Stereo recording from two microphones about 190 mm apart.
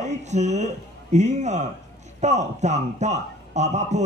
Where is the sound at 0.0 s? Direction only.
35° right (ahead or behind).